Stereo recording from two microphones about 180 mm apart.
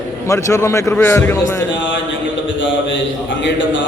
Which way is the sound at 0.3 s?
15° left (ahead or behind).